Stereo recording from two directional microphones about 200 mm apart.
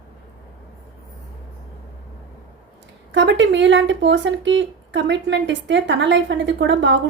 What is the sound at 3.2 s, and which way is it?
Speech, 65° right (ahead or behind).